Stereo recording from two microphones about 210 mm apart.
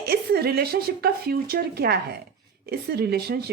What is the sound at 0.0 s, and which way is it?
Speech, 50° right (ahead or behind).